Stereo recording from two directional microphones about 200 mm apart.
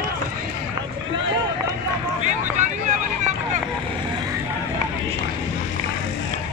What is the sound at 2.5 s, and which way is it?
Vehicle, 40° right (ahead or behind).